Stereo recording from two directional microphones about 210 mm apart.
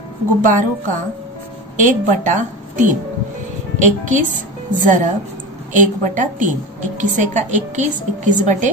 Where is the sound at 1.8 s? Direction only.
35° right (ahead or behind).